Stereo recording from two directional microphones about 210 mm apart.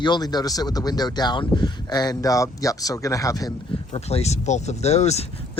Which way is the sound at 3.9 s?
30° left (ahead or behind).